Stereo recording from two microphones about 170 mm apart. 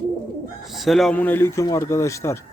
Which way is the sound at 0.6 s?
Centre (ahead or behind).